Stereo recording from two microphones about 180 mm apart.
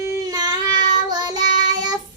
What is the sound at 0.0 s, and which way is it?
Child singing, 20° right (ahead or behind).